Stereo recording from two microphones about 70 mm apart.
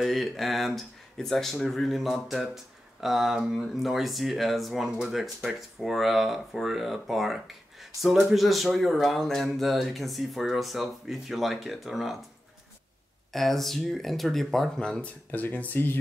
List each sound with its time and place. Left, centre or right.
0.0 s speech: centre
13.3 s speech: centre
15.3 s speech: left